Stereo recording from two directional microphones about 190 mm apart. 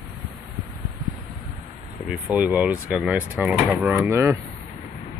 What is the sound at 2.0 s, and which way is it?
Speech, 5° right (ahead or behind).